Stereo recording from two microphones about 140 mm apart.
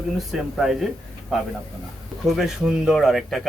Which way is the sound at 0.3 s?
Centre (ahead or behind).